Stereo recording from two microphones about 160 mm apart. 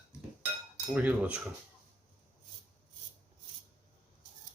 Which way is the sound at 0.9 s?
5° right (ahead or behind).